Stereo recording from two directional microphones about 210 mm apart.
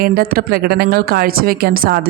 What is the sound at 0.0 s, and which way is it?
Speech, 45° right (ahead or behind).